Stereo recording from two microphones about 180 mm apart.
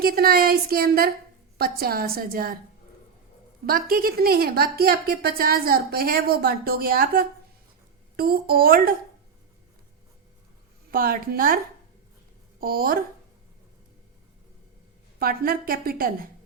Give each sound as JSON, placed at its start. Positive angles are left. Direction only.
{"t": 0.0, "sound": "a woman's voice", "side_deg": -55}
{"t": 3.7, "sound": "a woman's voice", "side_deg": -55}
{"t": 10.9, "sound": "a woman's voice", "side_deg": -55}
{"t": 15.2, "sound": "a woman's voice", "side_deg": -55}